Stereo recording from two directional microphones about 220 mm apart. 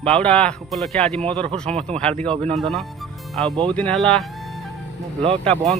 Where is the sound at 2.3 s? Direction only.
30° right (ahead or behind).